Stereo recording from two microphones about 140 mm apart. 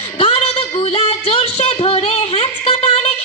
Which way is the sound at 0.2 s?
45° left (ahead or behind).